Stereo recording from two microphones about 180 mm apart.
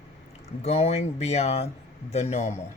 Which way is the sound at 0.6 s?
35° left (ahead or behind).